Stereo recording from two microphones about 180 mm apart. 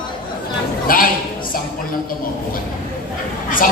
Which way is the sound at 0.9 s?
50° left (ahead or behind).